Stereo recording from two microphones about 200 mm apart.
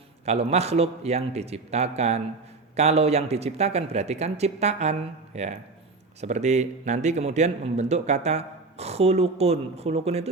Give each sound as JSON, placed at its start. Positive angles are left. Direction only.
{"t": 0.3, "sound": "speech", "side_deg": -30}